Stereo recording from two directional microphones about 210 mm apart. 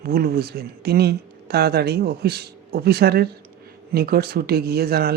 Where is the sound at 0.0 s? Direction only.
45° right (ahead or behind).